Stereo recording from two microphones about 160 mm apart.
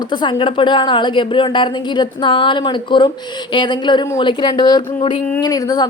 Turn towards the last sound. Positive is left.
turn(degrees=25)  # may be behind; listen again after turning